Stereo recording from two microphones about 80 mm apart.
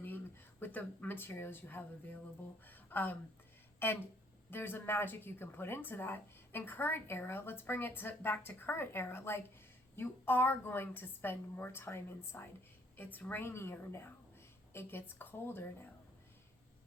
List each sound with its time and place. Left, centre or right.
0.6 s speech: left